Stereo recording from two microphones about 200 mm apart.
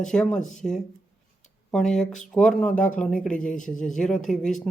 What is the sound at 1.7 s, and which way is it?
Speech, 5° left (ahead or behind).